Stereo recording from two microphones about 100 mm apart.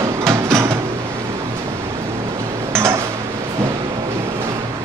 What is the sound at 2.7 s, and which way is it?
Dishes, 25° right (ahead or behind).